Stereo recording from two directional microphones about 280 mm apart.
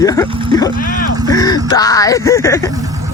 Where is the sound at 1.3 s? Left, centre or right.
Centre.